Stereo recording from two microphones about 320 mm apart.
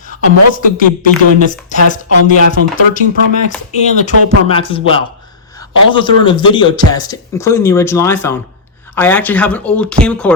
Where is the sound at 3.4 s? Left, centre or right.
Left.